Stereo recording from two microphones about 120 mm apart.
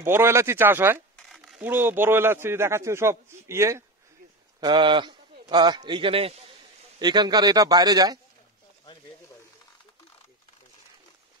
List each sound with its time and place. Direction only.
0.0 s a man's voice: 20° right (ahead or behind)
1.1 s a sound: centre (ahead or behind)
1.6 s a man's voice: 15° right (ahead or behind)
4.6 s a man's voice: 40° right (ahead or behind)
7.0 s a man's voice: 35° right (ahead or behind)